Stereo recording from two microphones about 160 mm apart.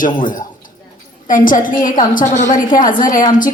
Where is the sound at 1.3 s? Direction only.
55° left (ahead or behind).